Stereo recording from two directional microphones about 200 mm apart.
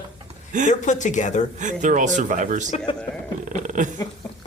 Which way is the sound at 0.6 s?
40° left (ahead or behind).